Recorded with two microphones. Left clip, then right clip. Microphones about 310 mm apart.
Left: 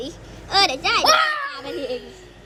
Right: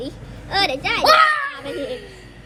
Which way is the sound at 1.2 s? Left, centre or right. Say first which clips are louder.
Right 5 dB; centre.